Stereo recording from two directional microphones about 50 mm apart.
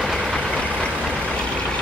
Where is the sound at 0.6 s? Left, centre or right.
Left.